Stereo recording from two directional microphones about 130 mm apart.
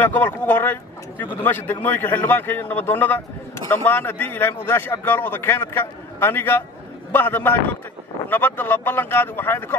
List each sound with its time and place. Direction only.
0.0 s a man's voice: 15° left (ahead or behind)